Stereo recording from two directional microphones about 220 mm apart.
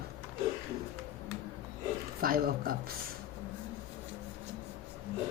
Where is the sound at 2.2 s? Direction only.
40° right (ahead or behind).